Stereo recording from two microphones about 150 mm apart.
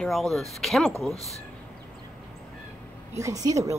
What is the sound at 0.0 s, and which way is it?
Speech, centre (ahead or behind).